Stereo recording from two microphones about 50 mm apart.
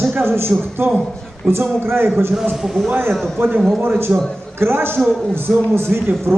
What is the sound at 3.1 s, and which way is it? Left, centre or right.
Speech, centre.